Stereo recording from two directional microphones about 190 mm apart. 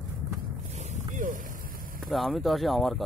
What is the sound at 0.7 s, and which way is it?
Wild animals, 40° right (ahead or behind).